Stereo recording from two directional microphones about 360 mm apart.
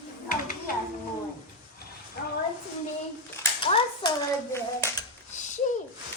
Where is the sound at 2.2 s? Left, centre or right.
Left.